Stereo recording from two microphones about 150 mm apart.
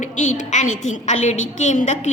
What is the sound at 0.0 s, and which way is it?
A woman's voice, 55° left (ahead or behind).